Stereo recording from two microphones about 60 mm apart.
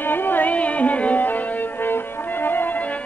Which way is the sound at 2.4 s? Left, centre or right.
Left.